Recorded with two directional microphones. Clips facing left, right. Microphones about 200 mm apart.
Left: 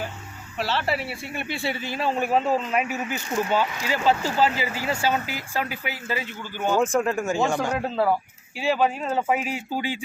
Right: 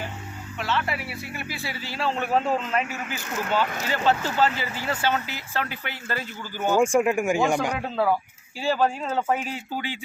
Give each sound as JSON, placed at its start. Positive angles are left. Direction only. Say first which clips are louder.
{"t": 0.6, "sound": "speech", "louder": "left 2 dB", "side_deg": 35}
{"t": 7.7, "sound": "speech", "louder": "left 1 dB", "side_deg": 5}